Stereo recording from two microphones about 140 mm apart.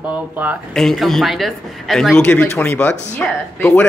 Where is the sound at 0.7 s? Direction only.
Centre (ahead or behind).